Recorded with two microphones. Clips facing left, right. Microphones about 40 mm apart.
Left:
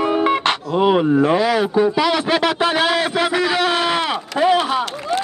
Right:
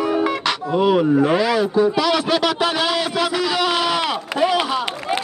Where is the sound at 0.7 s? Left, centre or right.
Left.